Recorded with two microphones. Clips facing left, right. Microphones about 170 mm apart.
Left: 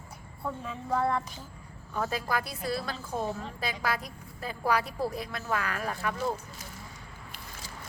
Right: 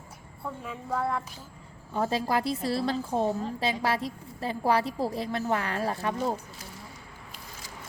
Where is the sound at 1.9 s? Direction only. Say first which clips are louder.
Right 4 dB; 30° right (ahead or behind).